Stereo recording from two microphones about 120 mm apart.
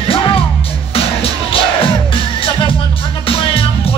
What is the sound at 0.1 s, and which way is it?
Music, 50° left (ahead or behind).